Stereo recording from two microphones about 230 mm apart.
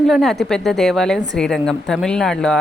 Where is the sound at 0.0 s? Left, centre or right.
Centre.